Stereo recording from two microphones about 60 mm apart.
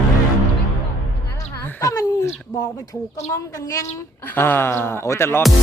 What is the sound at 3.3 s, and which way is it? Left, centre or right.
Speech, left.